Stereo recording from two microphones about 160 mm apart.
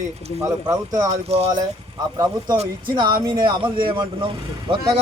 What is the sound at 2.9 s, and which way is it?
Speech, 30° right (ahead or behind).